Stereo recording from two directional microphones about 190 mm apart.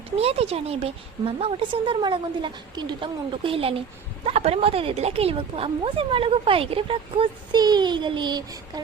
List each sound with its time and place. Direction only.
0.2 s speech: 30° right (ahead or behind)